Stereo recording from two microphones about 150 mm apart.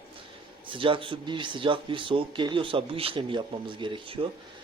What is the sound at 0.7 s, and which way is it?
Speech, 35° right (ahead or behind).